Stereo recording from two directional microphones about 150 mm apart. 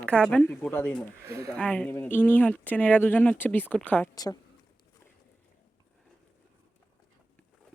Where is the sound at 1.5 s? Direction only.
10° left (ahead or behind).